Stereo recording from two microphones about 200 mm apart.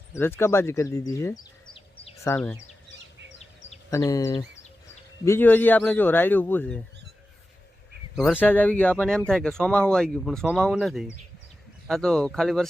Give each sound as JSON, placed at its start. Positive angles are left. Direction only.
{"t": 0.1, "sound": "speech", "side_deg": 10}
{"t": 3.8, "sound": "speech", "side_deg": 15}
{"t": 8.1, "sound": "speech", "side_deg": -5}
{"t": 8.4, "sound": "speech", "side_deg": 10}